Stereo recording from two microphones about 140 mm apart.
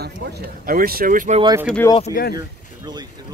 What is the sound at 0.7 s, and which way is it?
Speech, 90° right.